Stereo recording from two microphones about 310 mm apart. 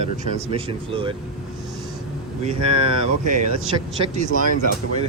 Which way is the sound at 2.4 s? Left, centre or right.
Centre.